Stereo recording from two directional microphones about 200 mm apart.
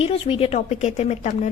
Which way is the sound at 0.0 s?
30° left (ahead or behind).